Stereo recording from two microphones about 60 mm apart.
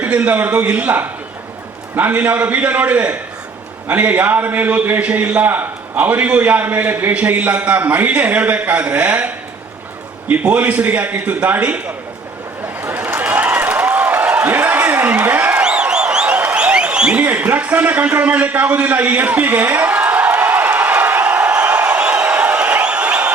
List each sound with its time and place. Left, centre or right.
0.0 s a man's voice: right
10.6 s a man's voice: right
12.6 s a sound: right
15.6 s applause: centre
17.3 s a man's voice: right
21.6 s a sound: centre